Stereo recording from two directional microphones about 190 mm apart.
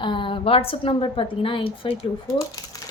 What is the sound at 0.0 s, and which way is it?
A woman's voice, 25° left (ahead or behind).